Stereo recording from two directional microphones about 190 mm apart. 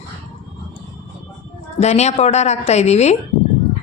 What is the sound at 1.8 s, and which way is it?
A woman's voice, 35° left (ahead or behind).